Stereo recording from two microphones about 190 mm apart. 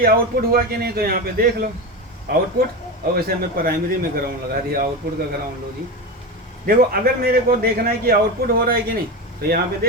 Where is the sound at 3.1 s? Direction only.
50° right (ahead or behind).